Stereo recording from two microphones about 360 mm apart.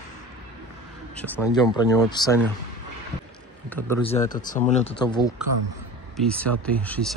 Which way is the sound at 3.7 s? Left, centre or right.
Centre.